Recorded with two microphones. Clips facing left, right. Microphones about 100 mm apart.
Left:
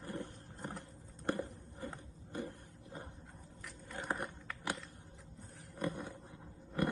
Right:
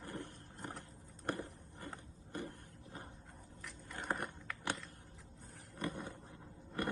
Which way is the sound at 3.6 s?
Centre (ahead or behind).